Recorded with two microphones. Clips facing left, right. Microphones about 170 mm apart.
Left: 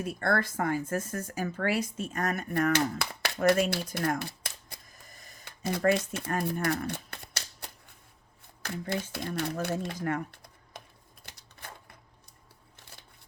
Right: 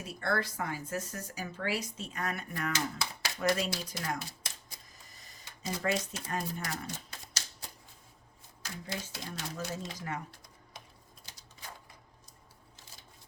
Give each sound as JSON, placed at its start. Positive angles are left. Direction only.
{"t": 0.0, "sound": "speech", "side_deg": 55}
{"t": 11.3, "sound": "typewriter", "side_deg": 60}
{"t": 12.7, "sound": "shuffling cards", "side_deg": 60}